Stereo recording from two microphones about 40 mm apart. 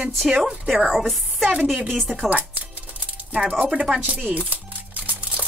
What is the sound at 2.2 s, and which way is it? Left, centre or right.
Music, right.